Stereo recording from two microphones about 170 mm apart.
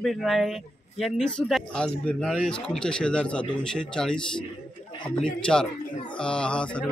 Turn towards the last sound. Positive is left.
turn(degrees=5)  # may be behind; listen again after turning